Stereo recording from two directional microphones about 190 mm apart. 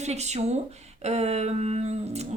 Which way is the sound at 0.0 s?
35° right (ahead or behind).